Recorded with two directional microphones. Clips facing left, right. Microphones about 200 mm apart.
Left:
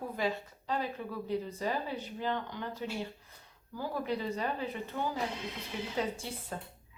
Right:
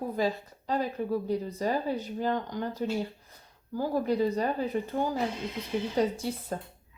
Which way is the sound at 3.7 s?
40° right (ahead or behind).